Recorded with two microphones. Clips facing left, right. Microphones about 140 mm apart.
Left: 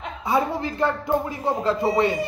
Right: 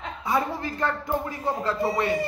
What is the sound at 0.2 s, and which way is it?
A woman's voice, 20° left (ahead or behind).